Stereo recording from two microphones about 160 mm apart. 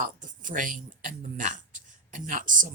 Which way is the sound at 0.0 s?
55° right (ahead or behind).